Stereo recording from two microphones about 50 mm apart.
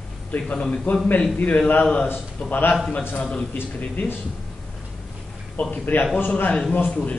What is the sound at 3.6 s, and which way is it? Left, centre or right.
Speech, left.